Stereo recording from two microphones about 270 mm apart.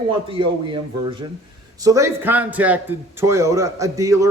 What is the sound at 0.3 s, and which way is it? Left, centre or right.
A man's voice, centre.